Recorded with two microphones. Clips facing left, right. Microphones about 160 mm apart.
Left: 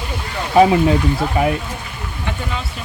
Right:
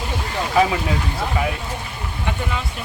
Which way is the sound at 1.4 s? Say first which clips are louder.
Left 6 dB; 30° left (ahead or behind).